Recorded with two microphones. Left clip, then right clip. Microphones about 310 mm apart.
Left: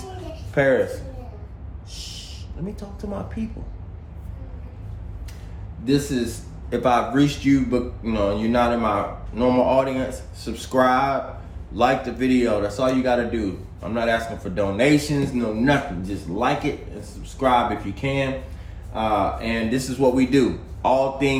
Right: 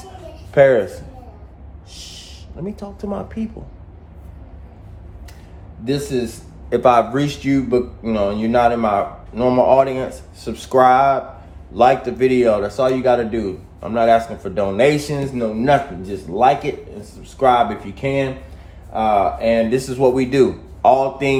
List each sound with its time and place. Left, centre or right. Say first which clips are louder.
0.5 s speech: right 7 dB; right
1.9 s a sound: even; right
5.8 s speech: right 2 dB; centre